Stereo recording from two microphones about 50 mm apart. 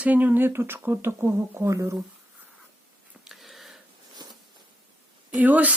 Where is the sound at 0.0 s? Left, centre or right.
Right.